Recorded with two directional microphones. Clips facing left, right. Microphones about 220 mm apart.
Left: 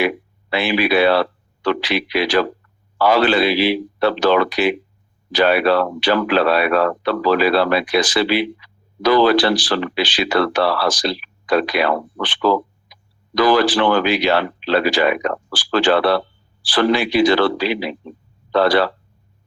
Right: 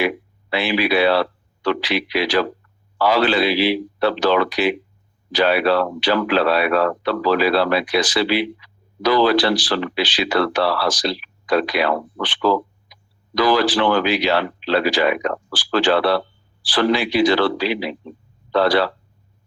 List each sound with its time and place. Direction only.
0.5 s speech: 50° left (ahead or behind)